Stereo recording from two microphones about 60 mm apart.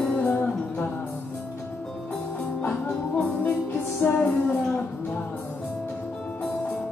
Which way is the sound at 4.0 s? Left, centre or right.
Left.